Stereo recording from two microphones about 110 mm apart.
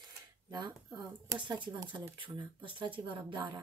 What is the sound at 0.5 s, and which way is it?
Speech, 40° right (ahead or behind).